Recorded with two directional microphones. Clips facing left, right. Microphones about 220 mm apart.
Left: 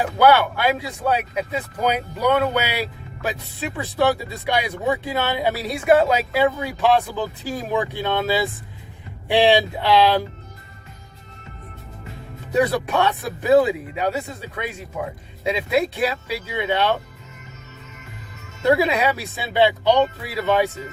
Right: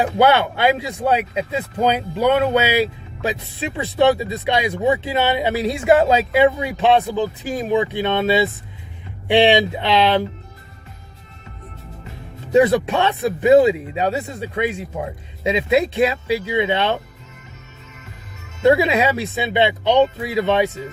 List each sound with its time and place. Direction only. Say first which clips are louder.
0.2 s speech: even; 25° right (ahead or behind)
12.5 s speech: right 5 dB; 25° right (ahead or behind)
18.6 s speech: right 3 dB; 25° right (ahead or behind)